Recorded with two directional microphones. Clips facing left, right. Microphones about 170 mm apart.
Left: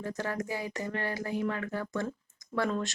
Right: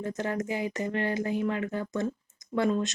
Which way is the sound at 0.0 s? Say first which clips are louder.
Right 3 dB; 20° right (ahead or behind).